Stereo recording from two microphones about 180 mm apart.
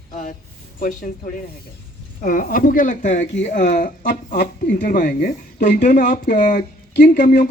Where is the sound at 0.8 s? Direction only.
50° left (ahead or behind).